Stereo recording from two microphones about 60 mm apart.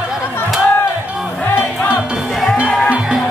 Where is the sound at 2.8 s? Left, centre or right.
Centre.